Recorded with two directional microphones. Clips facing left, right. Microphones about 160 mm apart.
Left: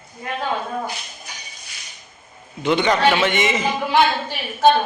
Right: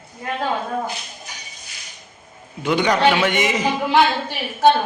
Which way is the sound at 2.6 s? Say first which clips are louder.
Even; 10° right (ahead or behind).